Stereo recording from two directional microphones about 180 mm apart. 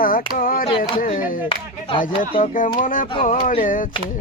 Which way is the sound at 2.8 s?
45° left (ahead or behind).